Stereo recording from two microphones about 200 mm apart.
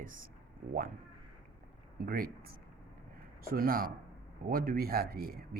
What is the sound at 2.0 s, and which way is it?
Speech, 45° right (ahead or behind).